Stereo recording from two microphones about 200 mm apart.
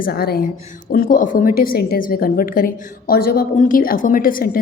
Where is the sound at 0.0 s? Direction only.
50° left (ahead or behind).